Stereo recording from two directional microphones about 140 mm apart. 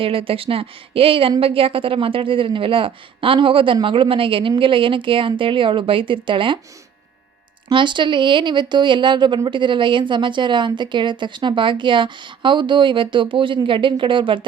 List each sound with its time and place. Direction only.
0.0 s speech: 40° right (ahead or behind)
7.7 s speech: 35° right (ahead or behind)